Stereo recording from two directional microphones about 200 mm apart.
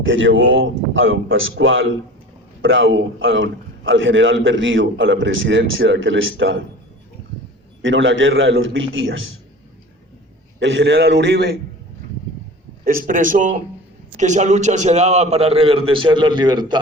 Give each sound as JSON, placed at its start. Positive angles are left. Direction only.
{"t": 0.0, "sound": "a man's voice", "side_deg": -70}
{"t": 7.8, "sound": "a man's voice", "side_deg": -70}
{"t": 10.6, "sound": "a man's voice", "side_deg": -65}
{"t": 12.8, "sound": "a man's voice", "side_deg": -45}